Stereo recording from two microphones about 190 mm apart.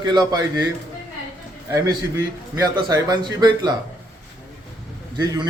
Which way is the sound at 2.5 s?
20° right (ahead or behind).